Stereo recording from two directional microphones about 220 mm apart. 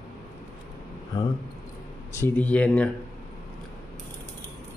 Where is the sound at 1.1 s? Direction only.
15° left (ahead or behind).